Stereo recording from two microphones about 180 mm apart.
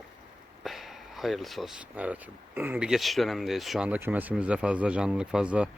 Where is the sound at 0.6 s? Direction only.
Centre (ahead or behind).